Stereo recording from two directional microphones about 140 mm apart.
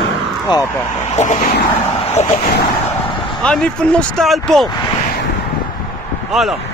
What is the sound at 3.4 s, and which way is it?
Speech, 5° left (ahead or behind).